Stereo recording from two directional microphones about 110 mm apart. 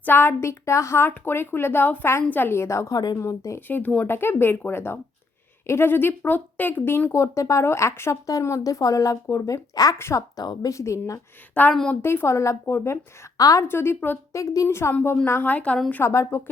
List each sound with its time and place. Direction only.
0.0 s a woman's voice: 20° left (ahead or behind)
10.3 s a woman's voice: 40° left (ahead or behind)
10.7 s a woman's voice: 25° left (ahead or behind)
11.5 s a woman's voice: 15° left (ahead or behind); by 13.7 s 35° left (ahead or behind)
13.7 s a woman's voice: 20° left (ahead or behind)
14.3 s a woman's voice: 30° left (ahead or behind)